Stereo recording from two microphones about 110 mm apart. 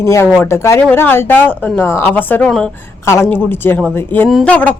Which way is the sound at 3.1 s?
20° left (ahead or behind).